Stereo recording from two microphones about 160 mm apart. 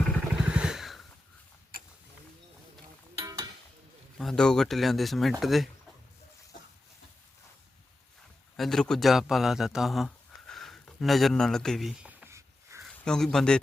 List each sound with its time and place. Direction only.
0.4 s motorcycle: 5° right (ahead or behind)
3.2 s a sound: 20° right (ahead or behind)
4.2 s speech: 5° left (ahead or behind)
8.5 s speech: centre (ahead or behind)
12.2 s a sound: 15° right (ahead or behind)
12.8 s speech: centre (ahead or behind)